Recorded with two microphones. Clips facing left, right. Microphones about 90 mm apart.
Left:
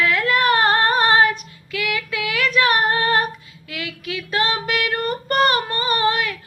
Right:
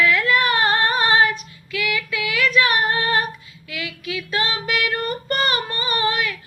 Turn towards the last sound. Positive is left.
turn(degrees=50)  # may be behind; listen again after turning